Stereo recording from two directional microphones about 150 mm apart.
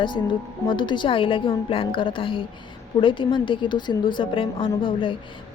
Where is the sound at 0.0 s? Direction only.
30° left (ahead or behind).